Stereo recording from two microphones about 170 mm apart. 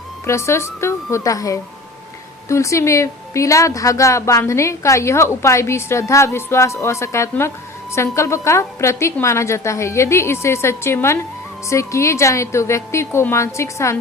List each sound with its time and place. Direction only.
0.3 s speech: 15° left (ahead or behind)